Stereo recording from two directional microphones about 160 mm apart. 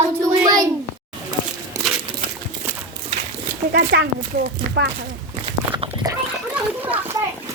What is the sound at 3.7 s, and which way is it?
Speech, 90° right.